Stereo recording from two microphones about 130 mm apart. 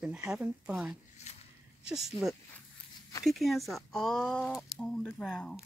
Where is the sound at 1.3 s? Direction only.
60° left (ahead or behind).